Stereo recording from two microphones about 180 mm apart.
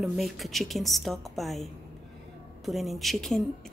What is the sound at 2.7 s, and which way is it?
A woman's voice, centre (ahead or behind).